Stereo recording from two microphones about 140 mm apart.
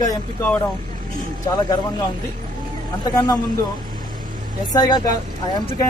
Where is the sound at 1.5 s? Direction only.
30° left (ahead or behind).